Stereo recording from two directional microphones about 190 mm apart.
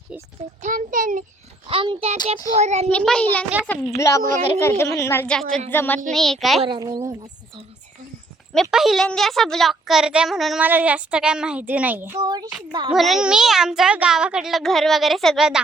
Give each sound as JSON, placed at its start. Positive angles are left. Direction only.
{"t": 0.6, "sound": "a child's voice", "side_deg": -45}
{"t": 1.6, "sound": "a child's voice", "side_deg": -25}
{"t": 2.9, "sound": "a woman's voice", "side_deg": 5}
{"t": 6.6, "sound": "a woman's voice", "side_deg": -25}
{"t": 8.7, "sound": "a child's voice", "side_deg": 0}
{"t": 12.2, "sound": "a woman's voice", "side_deg": -20}
{"t": 12.5, "sound": "a child's voice", "side_deg": -5}